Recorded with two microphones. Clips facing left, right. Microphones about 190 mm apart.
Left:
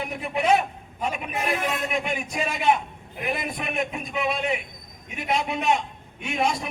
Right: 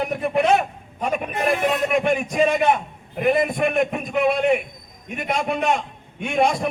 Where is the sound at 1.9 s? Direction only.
50° right (ahead or behind).